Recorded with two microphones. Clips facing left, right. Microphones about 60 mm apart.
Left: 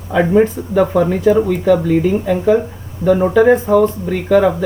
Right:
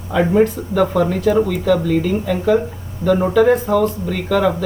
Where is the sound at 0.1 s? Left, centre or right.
Centre.